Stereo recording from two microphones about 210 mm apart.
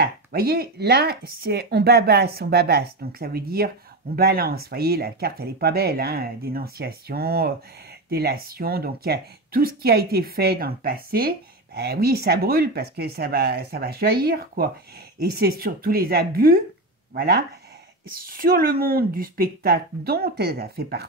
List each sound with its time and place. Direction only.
0.0 s speech: 45° right (ahead or behind)